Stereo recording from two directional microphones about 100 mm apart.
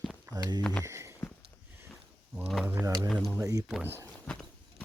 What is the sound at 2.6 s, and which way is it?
Speech, 20° right (ahead or behind).